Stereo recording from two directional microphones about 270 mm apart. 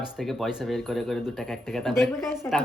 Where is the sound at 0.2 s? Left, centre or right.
Centre.